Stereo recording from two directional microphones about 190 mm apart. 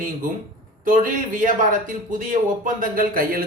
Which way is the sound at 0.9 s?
45° right (ahead or behind).